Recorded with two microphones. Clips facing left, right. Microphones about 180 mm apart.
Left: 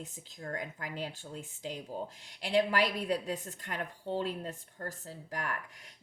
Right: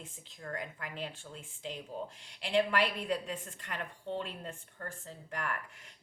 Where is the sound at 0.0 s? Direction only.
40° left (ahead or behind).